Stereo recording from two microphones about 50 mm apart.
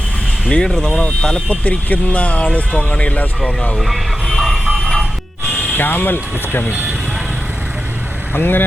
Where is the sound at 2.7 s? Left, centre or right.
Centre.